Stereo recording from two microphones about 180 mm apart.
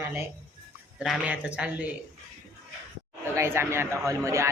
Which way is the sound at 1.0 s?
5° right (ahead or behind).